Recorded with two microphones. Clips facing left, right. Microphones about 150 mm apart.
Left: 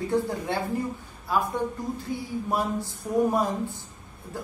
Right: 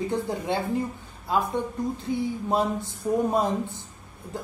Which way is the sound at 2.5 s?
25° right (ahead or behind).